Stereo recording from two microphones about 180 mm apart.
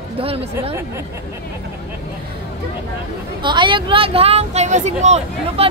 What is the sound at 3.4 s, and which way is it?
Speech, 25° right (ahead or behind).